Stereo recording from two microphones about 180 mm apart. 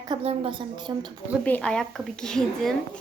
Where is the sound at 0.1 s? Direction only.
30° right (ahead or behind).